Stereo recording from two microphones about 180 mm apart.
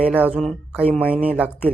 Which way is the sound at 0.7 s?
10° right (ahead or behind).